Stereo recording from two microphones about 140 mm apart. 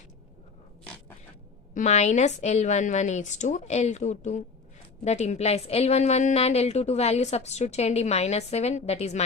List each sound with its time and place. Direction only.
1.7 s a woman's voice: 55° left (ahead or behind)